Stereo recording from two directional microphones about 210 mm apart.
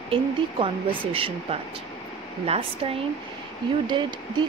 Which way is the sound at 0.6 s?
25° right (ahead or behind).